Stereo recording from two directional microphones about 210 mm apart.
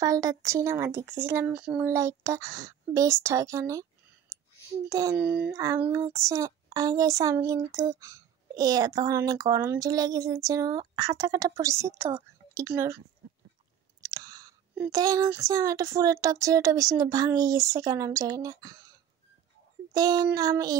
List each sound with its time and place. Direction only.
0.0 s child singing: 15° right (ahead or behind)
4.3 s clicking: 15° right (ahead or behind)
4.8 s child singing: 15° right (ahead or behind)
14.0 s child singing: 15° right (ahead or behind)
19.9 s child singing: 15° right (ahead or behind)